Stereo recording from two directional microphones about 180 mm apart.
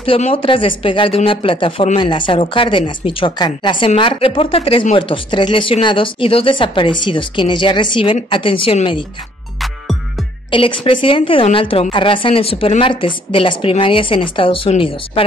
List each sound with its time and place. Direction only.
0.0 s speech: 30° left (ahead or behind)
10.5 s speech: 30° left (ahead or behind)